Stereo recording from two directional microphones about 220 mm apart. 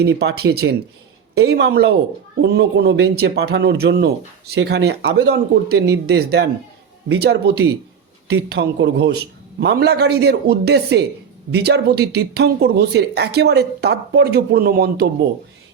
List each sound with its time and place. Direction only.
0.0 s speech: 50° right (ahead or behind)